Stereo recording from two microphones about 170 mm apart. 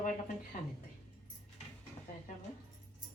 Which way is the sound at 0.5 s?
50° left (ahead or behind).